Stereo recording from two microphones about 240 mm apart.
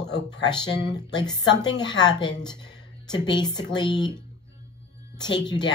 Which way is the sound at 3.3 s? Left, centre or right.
Centre.